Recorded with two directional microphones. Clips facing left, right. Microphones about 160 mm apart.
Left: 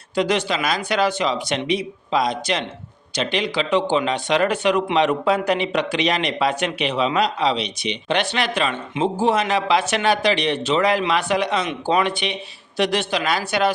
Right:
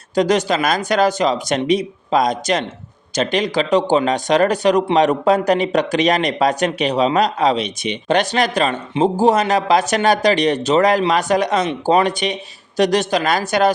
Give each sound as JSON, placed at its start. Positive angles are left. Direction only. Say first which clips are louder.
{"t": 0.2, "sound": "speech", "louder": "right 5 dB", "side_deg": -40}